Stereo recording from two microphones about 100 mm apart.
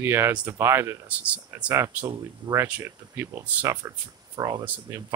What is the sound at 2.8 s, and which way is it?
Speech, 25° right (ahead or behind).